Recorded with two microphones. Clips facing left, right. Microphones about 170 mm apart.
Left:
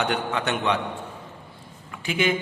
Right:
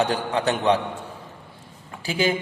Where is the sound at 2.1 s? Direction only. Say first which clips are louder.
Right 1 dB; 35° right (ahead or behind).